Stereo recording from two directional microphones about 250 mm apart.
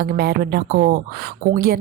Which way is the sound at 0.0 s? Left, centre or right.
Right.